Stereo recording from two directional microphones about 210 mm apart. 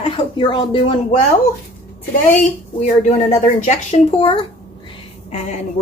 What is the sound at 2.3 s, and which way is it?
Speech, 35° left (ahead or behind).